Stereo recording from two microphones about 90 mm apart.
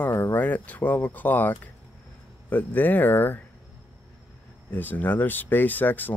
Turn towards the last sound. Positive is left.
turn(degrees=20)  # may be behind; listen again after turning